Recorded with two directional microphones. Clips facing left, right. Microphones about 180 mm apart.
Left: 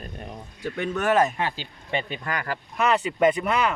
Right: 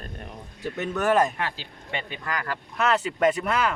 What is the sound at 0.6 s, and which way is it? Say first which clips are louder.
Speech: even; 5° right (ahead or behind).